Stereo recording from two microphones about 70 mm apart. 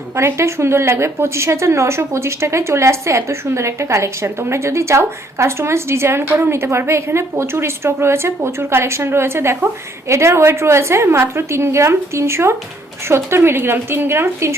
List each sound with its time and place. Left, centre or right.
0.2 s a woman's voice: right